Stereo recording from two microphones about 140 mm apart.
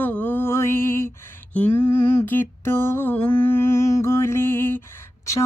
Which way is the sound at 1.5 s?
15° left (ahead or behind).